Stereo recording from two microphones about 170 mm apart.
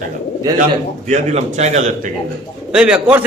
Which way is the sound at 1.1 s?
40° right (ahead or behind).